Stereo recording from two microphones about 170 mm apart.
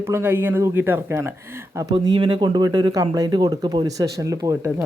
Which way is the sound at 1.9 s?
30° right (ahead or behind).